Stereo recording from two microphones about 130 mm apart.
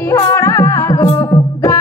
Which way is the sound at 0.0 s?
25° left (ahead or behind).